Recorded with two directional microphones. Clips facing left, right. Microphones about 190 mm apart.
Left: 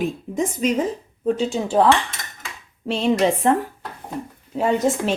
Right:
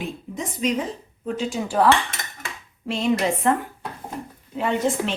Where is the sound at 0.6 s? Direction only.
45° left (ahead or behind).